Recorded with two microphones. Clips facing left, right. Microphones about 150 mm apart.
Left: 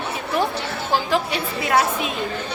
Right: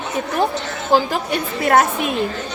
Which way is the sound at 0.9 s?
50° right (ahead or behind).